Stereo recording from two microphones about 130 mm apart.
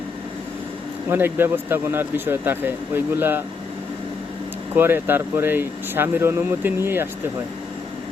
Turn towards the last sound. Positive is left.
turn(degrees=-15)  # may be behind; listen again after turning